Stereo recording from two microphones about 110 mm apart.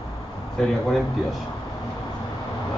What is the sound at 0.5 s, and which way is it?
Speech, 5° left (ahead or behind).